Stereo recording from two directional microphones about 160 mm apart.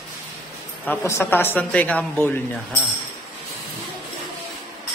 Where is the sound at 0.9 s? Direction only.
15° left (ahead or behind).